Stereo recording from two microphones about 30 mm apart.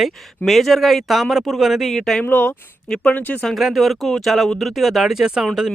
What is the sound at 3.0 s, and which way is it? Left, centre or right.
Speech, left.